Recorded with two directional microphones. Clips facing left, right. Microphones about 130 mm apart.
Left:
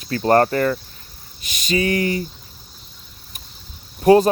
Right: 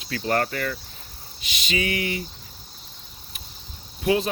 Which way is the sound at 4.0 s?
45° left (ahead or behind).